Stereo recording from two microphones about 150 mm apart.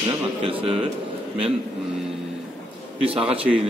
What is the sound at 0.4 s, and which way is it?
Speech, 40° right (ahead or behind).